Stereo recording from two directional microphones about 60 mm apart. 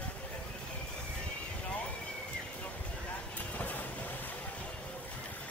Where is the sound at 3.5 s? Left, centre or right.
Left.